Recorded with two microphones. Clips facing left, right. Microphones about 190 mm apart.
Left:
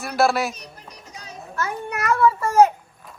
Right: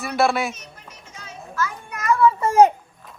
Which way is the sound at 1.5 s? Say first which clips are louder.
Left 2 dB; 65° left (ahead or behind).